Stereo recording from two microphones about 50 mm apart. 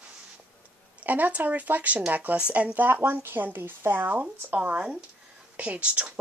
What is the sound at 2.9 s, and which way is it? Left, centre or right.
Speech, right.